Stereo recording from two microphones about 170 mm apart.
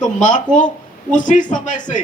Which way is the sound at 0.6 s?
50° left (ahead or behind).